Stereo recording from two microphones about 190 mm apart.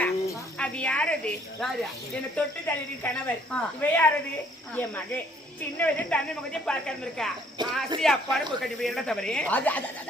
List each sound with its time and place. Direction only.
0.0 s snake: 5° left (ahead or behind)
2.3 s speech: 10° left (ahead or behind)
7.6 s speech: 25° right (ahead or behind)
8.0 s speech: 5° left (ahead or behind)